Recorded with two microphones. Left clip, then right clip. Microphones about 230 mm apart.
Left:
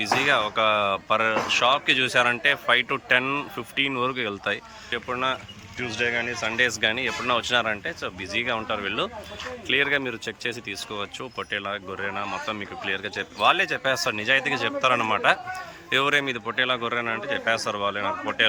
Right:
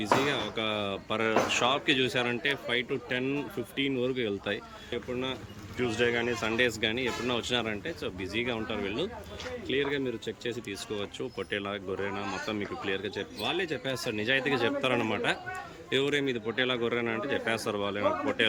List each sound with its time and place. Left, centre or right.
0.0 s speech: centre